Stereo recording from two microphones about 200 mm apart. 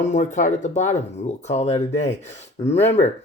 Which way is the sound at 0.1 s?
35° left (ahead or behind).